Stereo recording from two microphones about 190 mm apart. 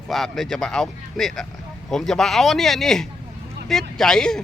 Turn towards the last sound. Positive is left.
turn(degrees=5)  # may be behind; listen again after turning